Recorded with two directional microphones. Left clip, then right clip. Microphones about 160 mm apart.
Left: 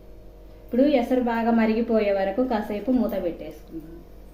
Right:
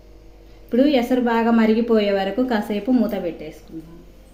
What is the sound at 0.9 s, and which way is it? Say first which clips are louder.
A woman's voice: right 3 dB; 65° right (ahead or behind).